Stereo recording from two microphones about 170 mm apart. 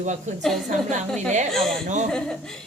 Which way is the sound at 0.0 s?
45° right (ahead or behind).